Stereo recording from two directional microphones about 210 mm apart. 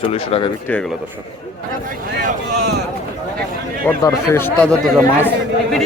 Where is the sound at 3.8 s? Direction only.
10° left (ahead or behind).